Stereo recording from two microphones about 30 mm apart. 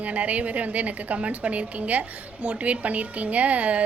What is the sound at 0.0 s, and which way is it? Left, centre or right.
A woman's voice, right.